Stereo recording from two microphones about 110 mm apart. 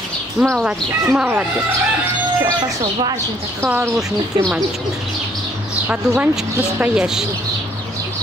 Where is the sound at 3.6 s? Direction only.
25° right (ahead or behind).